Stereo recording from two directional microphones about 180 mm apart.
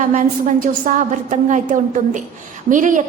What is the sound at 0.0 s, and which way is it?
A woman's voice, 45° right (ahead or behind).